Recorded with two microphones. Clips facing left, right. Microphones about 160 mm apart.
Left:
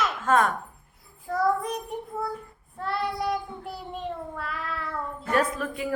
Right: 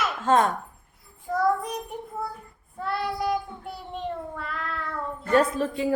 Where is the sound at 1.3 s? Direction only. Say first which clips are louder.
Right 1 dB; centre (ahead or behind).